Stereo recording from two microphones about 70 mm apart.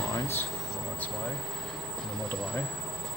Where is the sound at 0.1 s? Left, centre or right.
Left.